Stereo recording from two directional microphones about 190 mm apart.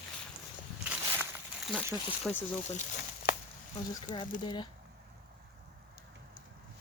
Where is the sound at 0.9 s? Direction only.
10° right (ahead or behind).